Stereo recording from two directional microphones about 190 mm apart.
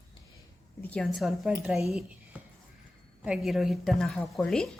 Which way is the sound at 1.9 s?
5° right (ahead or behind).